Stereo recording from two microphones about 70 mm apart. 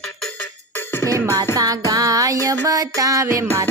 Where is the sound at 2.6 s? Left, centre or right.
Right.